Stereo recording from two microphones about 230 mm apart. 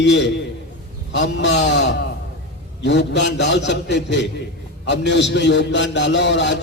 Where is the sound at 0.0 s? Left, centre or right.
Left.